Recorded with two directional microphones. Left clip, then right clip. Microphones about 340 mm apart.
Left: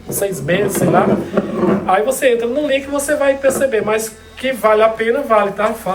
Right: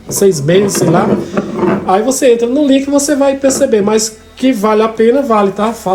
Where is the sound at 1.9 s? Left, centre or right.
Centre.